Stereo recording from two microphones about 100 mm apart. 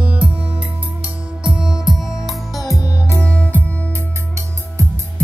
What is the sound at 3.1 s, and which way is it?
Music, 10° left (ahead or behind).